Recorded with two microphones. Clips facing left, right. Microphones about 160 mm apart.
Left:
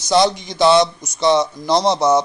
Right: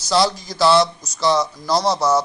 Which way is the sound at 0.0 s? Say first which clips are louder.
Left 3 dB; 20° left (ahead or behind).